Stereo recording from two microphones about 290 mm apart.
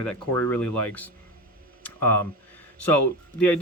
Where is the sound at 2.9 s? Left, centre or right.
Centre.